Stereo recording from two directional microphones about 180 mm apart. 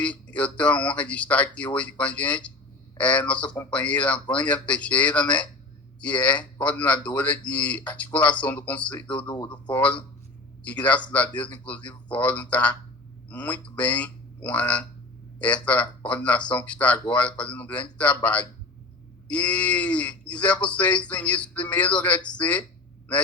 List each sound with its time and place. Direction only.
0.0 s speech: 5° left (ahead or behind)
9.2 s speech: 20° left (ahead or behind)
9.6 s a man's voice: 5° left (ahead or behind)